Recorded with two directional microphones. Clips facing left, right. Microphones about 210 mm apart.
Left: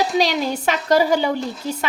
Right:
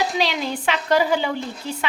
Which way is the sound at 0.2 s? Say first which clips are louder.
Left 4 dB; 40° left (ahead or behind).